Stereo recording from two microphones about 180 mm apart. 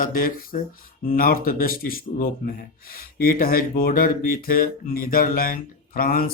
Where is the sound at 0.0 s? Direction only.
50° left (ahead or behind).